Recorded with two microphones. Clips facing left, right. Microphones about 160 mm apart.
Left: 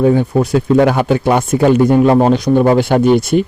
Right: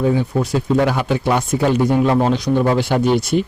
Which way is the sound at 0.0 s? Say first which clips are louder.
Left 6 dB; 50° left (ahead or behind).